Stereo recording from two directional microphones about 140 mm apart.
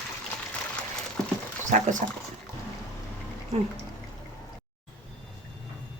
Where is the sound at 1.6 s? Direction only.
60° right (ahead or behind).